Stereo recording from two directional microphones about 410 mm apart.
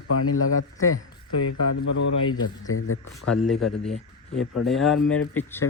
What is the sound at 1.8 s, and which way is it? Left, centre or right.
A man's voice, left.